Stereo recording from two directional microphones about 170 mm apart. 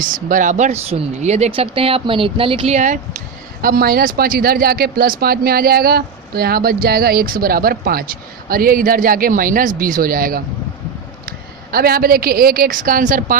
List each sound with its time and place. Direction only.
0.0 s speech: 50° right (ahead or behind)
3.6 s a woman's voice: 60° right (ahead or behind)